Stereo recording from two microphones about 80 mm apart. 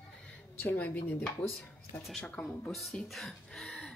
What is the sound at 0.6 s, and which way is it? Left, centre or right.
Speech, left.